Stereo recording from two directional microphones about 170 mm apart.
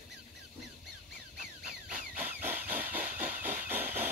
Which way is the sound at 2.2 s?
10° right (ahead or behind).